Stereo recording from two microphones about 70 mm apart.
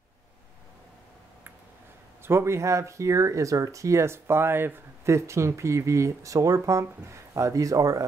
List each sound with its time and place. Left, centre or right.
2.2 s speech: right